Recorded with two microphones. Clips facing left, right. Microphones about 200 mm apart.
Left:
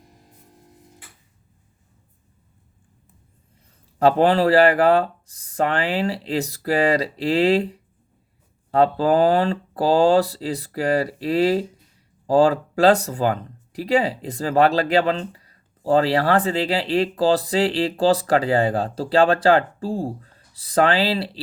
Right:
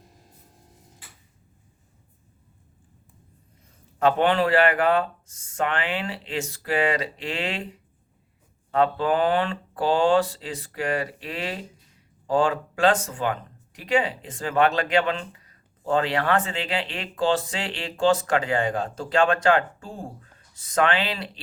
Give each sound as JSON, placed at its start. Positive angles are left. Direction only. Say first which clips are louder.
{"t": 3.9, "sound": "speech", "louder": "left 4 dB", "side_deg": 35}